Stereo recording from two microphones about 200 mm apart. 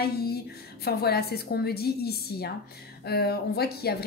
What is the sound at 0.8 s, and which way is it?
Speech, 50° left (ahead or behind).